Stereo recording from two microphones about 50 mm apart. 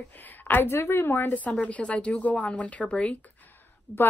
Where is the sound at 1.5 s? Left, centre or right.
Left.